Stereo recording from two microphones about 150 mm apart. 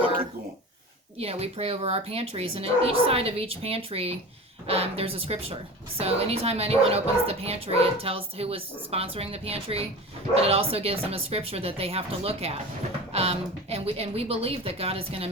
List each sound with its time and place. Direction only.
1.2 s speech: 45° right (ahead or behind)